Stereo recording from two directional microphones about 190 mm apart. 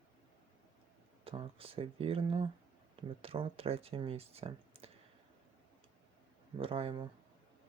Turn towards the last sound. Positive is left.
turn(degrees=-25)  # may be behind; listen again after turning